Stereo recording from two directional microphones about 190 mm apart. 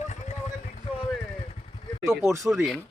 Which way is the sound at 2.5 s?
Centre (ahead or behind).